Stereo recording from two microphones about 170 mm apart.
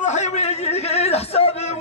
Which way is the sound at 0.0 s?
45° left (ahead or behind).